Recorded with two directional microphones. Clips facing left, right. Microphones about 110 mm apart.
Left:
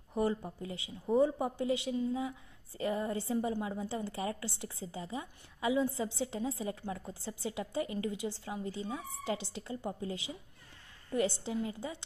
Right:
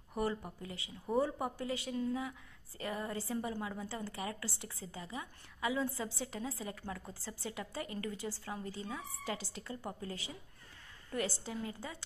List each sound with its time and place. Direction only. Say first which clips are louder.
0.6 s a woman's voice: left 4 dB; 25° left (ahead or behind)